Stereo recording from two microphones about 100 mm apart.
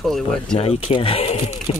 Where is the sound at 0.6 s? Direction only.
85° left.